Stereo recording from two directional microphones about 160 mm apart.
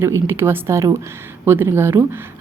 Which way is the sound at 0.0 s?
15° right (ahead or behind).